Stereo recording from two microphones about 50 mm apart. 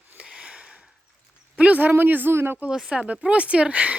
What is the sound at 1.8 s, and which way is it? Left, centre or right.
Speech, right.